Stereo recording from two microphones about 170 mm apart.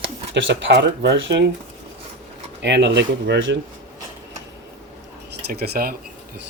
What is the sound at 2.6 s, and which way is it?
Speech, 90° right.